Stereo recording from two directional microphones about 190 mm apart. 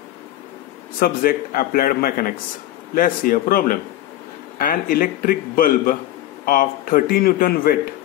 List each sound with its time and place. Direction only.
0.9 s a man's voice: 50° left (ahead or behind)